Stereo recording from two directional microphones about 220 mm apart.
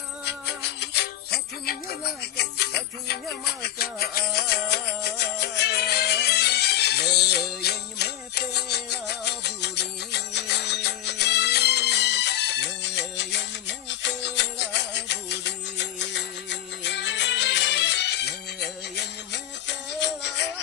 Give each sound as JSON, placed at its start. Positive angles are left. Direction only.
{"t": 0.3, "sound": "music", "side_deg": 50}